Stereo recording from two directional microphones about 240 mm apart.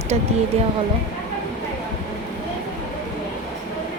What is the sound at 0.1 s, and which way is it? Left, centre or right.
Speech, right.